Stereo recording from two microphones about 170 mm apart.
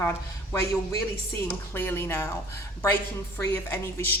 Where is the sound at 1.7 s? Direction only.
15° left (ahead or behind).